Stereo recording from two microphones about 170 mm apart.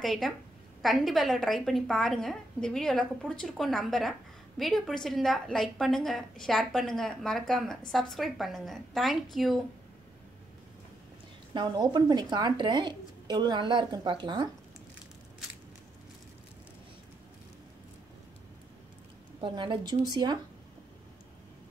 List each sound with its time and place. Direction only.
0.0 s a woman's voice: centre (ahead or behind)
11.5 s a woman's voice: 25° right (ahead or behind)
19.4 s a woman's voice: 30° right (ahead or behind)